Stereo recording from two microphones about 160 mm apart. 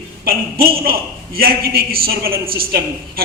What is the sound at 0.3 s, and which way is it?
A man's voice, 70° right (ahead or behind).